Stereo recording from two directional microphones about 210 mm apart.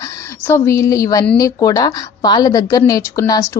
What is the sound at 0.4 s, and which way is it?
A woman's voice, 10° left (ahead or behind).